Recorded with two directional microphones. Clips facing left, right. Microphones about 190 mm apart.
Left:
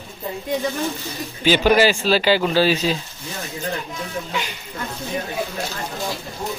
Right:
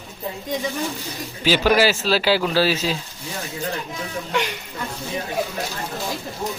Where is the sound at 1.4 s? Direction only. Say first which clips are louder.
Left 2 dB; 5° right (ahead or behind).